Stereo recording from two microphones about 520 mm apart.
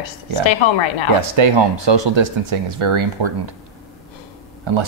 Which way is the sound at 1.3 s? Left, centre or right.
Right.